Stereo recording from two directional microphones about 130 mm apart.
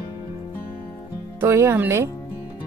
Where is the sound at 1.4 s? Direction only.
20° right (ahead or behind).